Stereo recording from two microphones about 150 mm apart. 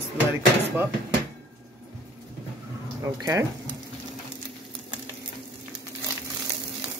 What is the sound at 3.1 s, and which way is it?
Speech, 20° right (ahead or behind).